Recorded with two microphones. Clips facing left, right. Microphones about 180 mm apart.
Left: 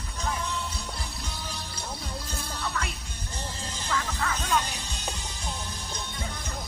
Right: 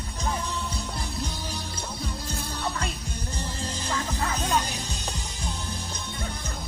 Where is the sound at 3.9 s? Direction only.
30° right (ahead or behind).